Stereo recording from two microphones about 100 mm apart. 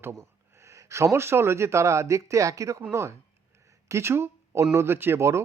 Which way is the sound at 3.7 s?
30° right (ahead or behind).